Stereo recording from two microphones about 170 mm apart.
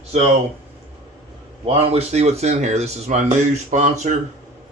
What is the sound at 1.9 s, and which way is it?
Speech, 40° right (ahead or behind).